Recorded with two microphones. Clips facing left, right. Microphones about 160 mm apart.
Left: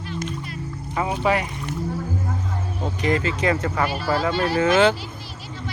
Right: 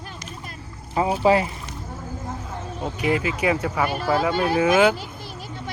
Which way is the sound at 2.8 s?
10° right (ahead or behind).